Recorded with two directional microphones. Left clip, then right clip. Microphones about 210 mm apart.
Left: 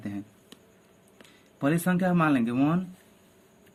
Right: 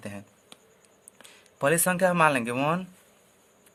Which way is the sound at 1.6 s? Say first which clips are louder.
Right 4 dB; 50° right (ahead or behind).